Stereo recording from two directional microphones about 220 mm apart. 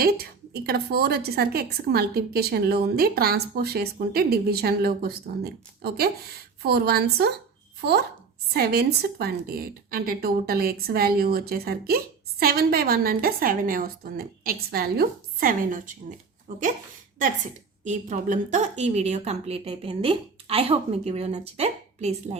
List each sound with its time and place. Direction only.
0.0 s a woman's voice: 45° right (ahead or behind)
17.8 s a woman's voice: 35° right (ahead or behind)